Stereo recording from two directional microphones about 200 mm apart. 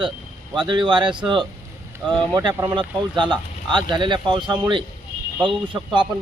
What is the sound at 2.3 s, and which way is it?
Speech, 20° right (ahead or behind).